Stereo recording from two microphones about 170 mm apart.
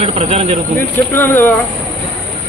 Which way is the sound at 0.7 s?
15° left (ahead or behind).